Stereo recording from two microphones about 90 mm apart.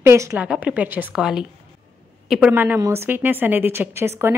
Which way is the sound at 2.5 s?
20° right (ahead or behind).